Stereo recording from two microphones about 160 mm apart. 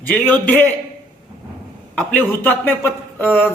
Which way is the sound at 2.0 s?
10° left (ahead or behind).